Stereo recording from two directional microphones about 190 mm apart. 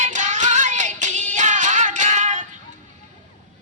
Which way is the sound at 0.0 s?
40° right (ahead or behind).